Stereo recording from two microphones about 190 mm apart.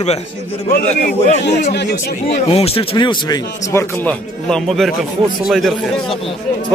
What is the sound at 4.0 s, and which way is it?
A man's voice, 5° left (ahead or behind).